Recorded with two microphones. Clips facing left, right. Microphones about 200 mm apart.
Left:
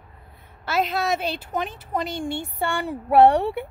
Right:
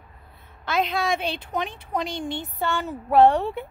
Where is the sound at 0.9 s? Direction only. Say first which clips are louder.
Left 1 dB; 5° left (ahead or behind).